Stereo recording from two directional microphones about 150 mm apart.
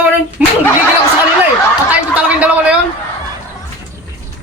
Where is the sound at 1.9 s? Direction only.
10° right (ahead or behind).